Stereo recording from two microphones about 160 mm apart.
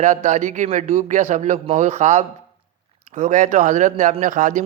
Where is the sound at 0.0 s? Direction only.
45° right (ahead or behind).